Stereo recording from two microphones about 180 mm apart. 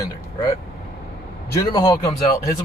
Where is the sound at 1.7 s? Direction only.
25° left (ahead or behind).